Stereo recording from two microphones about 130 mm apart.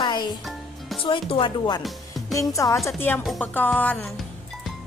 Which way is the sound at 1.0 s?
40° left (ahead or behind).